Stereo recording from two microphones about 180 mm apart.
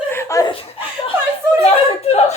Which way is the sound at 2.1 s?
35° left (ahead or behind).